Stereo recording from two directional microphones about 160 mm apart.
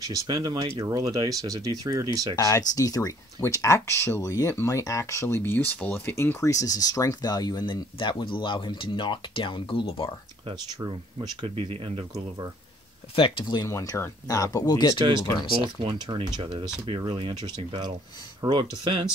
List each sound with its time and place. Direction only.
0.0 s speech: 20° right (ahead or behind)
2.3 s speech: 20° left (ahead or behind)
10.8 s speech: 25° right (ahead or behind)
13.1 s speech: 30° left (ahead or behind)
15.8 s speech: 30° right (ahead or behind)